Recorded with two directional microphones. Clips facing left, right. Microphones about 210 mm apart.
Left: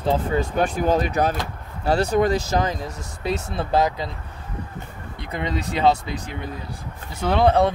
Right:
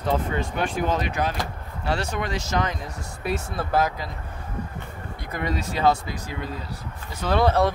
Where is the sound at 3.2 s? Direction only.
20° left (ahead or behind).